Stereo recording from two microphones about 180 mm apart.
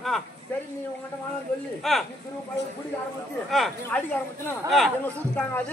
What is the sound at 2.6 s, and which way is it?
Speech, 75° left (ahead or behind).